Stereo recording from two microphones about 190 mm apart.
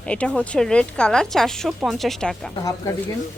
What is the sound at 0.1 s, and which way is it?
A woman's voice, 5° left (ahead or behind).